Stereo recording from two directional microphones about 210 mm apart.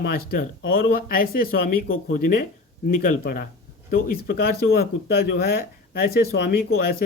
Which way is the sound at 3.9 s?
45° left (ahead or behind).